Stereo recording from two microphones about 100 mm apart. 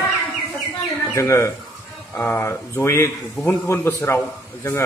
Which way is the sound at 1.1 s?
30° left (ahead or behind).